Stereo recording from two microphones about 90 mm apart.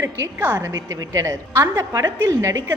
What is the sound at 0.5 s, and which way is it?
A woman's voice, 40° right (ahead or behind).